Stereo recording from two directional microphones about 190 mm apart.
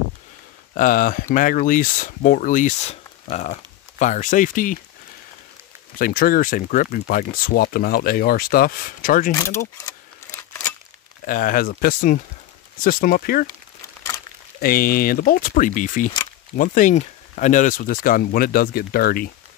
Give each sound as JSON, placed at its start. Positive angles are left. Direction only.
{"t": 0.7, "sound": "speech", "side_deg": 45}
{"t": 5.9, "sound": "speech", "side_deg": 50}
{"t": 9.3, "sound": "speech", "side_deg": 15}
{"t": 9.8, "sound": "scissors", "side_deg": 10}
{"t": 11.2, "sound": "speech", "side_deg": 45}
{"t": 14.6, "sound": "speech", "side_deg": 50}